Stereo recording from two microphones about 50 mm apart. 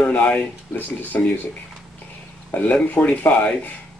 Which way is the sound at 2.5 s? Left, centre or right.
Left.